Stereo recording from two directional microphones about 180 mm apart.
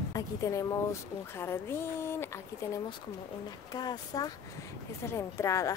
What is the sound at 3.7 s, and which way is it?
Speech, 20° left (ahead or behind).